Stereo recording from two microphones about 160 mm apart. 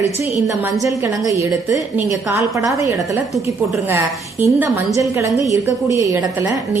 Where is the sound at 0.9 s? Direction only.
20° right (ahead or behind).